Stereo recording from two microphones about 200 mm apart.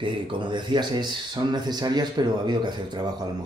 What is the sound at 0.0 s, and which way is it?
Speech, 25° right (ahead or behind).